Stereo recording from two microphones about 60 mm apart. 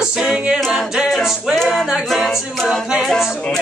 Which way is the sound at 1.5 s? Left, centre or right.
Centre.